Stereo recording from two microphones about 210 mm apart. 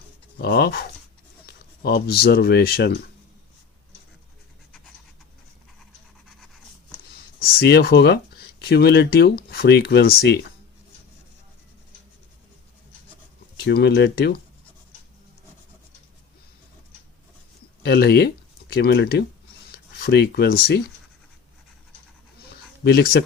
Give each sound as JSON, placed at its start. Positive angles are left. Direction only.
{"t": 0.3, "sound": "speech", "side_deg": 50}
{"t": 6.2, "sound": "a sound", "side_deg": 0}
{"t": 7.3, "sound": "speech", "side_deg": 50}
{"t": 13.7, "sound": "speech", "side_deg": 50}
{"t": 17.8, "sound": "speech", "side_deg": 50}
{"t": 22.8, "sound": "speech", "side_deg": 50}